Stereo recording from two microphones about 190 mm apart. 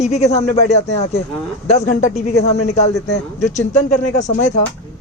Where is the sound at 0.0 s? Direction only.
35° left (ahead or behind).